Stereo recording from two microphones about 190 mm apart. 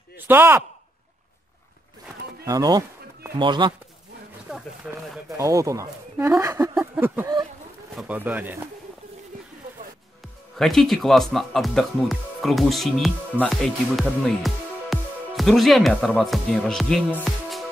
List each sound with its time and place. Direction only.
0.3 s speech: 10° right (ahead or behind)
2.4 s speech: 20° right (ahead or behind)
4.5 s speech: 5° right (ahead or behind)
5.4 s speech: 15° right (ahead or behind)
10.6 s speech: centre (ahead or behind)